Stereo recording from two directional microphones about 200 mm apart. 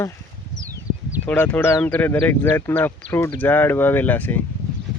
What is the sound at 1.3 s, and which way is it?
Speech, 10° left (ahead or behind).